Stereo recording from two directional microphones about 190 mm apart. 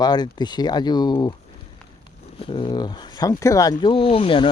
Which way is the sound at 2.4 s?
25° left (ahead or behind).